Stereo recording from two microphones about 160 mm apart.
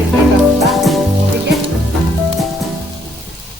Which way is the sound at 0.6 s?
Centre (ahead or behind).